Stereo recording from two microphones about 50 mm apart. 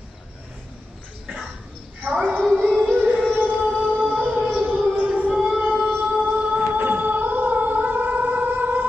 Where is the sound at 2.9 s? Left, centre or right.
Right.